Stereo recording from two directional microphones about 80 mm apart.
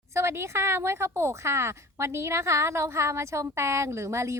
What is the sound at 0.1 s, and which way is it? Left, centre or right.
A woman's voice, right.